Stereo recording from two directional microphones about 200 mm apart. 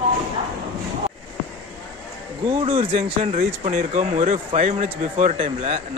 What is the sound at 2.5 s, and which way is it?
Speech, 30° right (ahead or behind).